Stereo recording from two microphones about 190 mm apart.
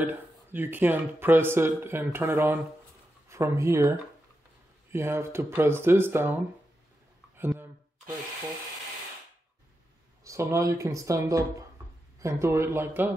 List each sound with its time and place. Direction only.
0.0 s speech: 10° right (ahead or behind)
4.9 s speech: 15° right (ahead or behind)
7.3 s a sound: 10° right (ahead or behind)
10.2 s speech: 15° right (ahead or behind)